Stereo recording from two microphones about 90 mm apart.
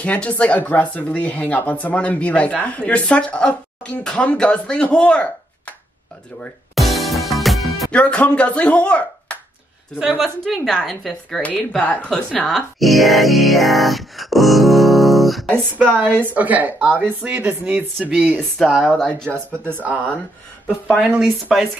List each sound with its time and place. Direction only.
0.0 s speech: 15° left (ahead or behind)
6.7 s music: centre (ahead or behind)
7.9 s speech: 15° left (ahead or behind)
9.9 s speech: 5° right (ahead or behind)
11.4 s speech: 15° left (ahead or behind)
15.5 s speech: 20° right (ahead or behind); by 18.9 s 5° right (ahead or behind)
18.9 s speech: 10° left (ahead or behind)
19.7 s speech: 15° right (ahead or behind)
21.0 s speech: 10° right (ahead or behind)